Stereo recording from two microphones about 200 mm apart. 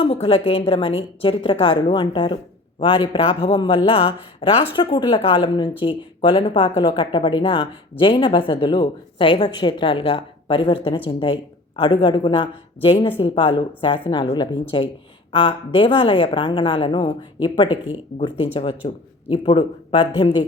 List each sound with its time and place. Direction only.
0.0 s speech: 30° left (ahead or behind)